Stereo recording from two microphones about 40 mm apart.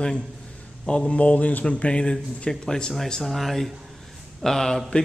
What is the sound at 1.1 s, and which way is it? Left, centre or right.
Speech, left.